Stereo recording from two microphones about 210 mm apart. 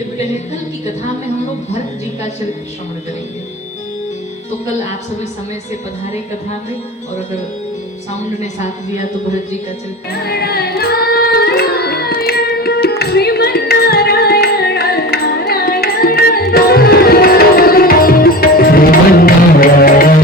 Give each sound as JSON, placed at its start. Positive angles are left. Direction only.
{"t": 8.4, "sound": "a woman's voice", "side_deg": 35}
{"t": 10.1, "sound": "carnatic music", "side_deg": 50}
{"t": 13.0, "sound": "music", "side_deg": 50}